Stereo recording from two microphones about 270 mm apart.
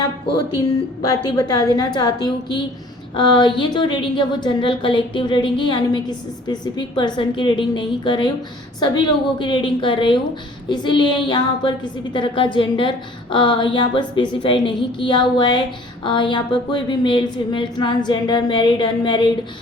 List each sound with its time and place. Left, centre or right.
1.2 s a woman's voice: centre